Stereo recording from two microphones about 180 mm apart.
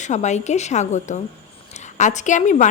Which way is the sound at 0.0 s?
40° left (ahead or behind).